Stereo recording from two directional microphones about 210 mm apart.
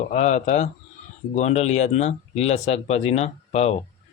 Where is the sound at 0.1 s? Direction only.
35° left (ahead or behind).